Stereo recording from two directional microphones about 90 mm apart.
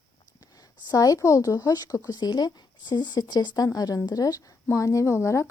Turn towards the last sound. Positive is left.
turn(degrees=35)  # may be behind; listen again after turning